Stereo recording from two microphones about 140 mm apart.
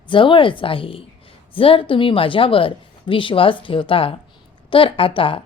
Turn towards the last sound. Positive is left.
turn(degrees=40)  # may be behind; listen again after turning